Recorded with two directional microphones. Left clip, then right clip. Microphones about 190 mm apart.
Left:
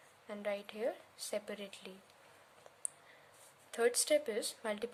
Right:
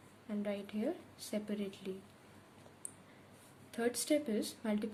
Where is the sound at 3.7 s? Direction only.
40° left (ahead or behind).